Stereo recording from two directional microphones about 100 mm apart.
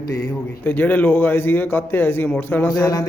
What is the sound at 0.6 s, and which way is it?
A man's voice, 15° left (ahead or behind).